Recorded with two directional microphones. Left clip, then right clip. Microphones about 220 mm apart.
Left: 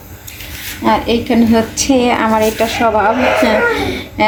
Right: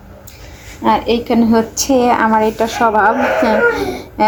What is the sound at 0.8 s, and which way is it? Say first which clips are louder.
A woman's voice: even; 5° right (ahead or behind).